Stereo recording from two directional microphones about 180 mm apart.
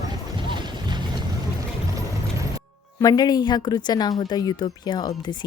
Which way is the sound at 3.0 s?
20° left (ahead or behind).